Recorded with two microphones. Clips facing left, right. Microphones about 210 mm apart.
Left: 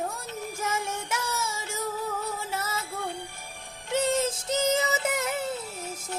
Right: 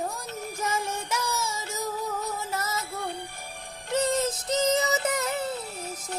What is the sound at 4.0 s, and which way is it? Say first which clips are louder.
Music: even; 25° left (ahead or behind).